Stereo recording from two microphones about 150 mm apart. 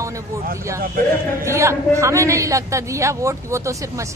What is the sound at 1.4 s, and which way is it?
A man's voice, 20° right (ahead or behind).